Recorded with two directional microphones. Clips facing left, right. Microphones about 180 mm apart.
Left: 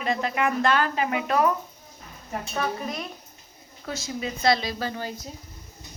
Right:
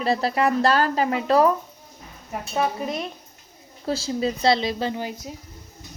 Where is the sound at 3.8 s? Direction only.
30° right (ahead or behind).